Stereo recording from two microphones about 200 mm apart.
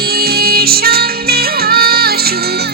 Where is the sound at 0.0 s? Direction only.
50° right (ahead or behind).